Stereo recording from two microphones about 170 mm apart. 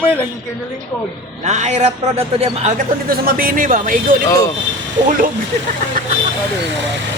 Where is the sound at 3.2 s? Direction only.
60° right (ahead or behind).